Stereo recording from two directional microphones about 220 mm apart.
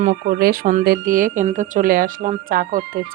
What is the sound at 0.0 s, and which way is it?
Speech, 40° right (ahead or behind).